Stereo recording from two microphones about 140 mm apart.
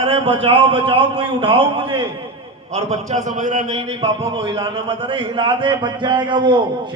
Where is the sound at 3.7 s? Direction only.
45° right (ahead or behind).